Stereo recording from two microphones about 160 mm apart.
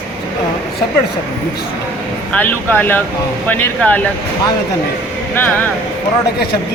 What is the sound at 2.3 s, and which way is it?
Speech, 10° left (ahead or behind).